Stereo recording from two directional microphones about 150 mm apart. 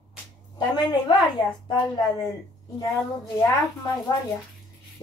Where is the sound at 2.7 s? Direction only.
25° left (ahead or behind).